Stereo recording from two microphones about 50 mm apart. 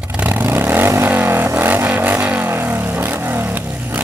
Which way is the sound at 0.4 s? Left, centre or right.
Right.